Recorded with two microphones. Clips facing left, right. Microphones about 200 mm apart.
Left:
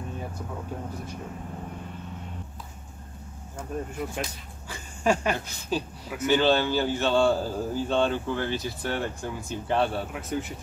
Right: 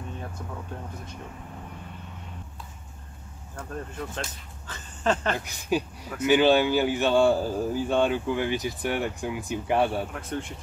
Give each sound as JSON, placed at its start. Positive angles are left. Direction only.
{"t": 3.5, "sound": "speech", "side_deg": 10}
{"t": 5.4, "sound": "speech", "side_deg": -15}
{"t": 10.1, "sound": "speech", "side_deg": 5}